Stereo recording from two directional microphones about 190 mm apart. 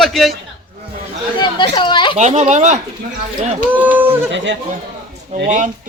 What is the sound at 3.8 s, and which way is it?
Speech, 10° right (ahead or behind).